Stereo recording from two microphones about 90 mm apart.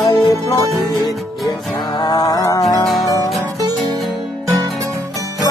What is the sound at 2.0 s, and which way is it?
Music, 50° left (ahead or behind).